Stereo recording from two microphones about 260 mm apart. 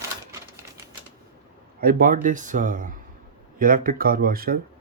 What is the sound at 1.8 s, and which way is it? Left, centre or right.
Speech, right.